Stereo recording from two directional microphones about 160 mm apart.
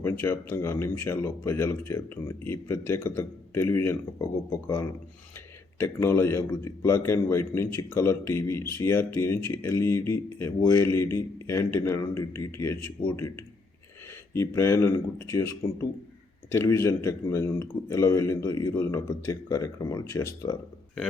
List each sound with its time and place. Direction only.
0.0 s a man's voice: 15° left (ahead or behind)